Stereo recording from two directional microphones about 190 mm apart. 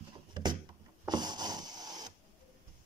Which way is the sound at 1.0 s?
20° right (ahead or behind).